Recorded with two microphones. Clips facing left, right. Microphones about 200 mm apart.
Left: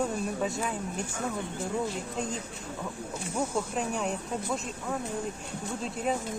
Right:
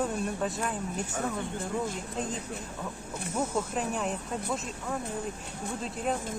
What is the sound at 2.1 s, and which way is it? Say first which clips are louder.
Speech: even; centre (ahead or behind).